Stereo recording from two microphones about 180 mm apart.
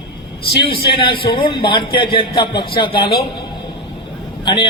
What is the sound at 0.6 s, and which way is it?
A man's voice, 60° left (ahead or behind).